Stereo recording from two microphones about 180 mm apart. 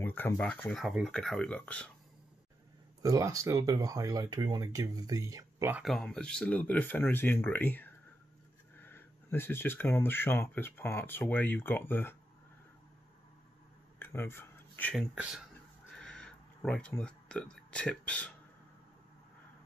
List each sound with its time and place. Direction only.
0.0 s speech: 10° left (ahead or behind)
3.0 s speech: 20° right (ahead or behind)
5.8 s speech: centre (ahead or behind)
13.9 s a sound: 15° left (ahead or behind)